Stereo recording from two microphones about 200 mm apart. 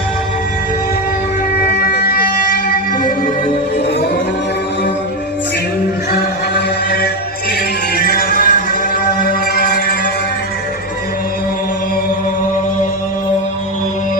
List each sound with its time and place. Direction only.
1.6 s music: 50° left (ahead or behind)
6.1 s music: 50° left (ahead or behind)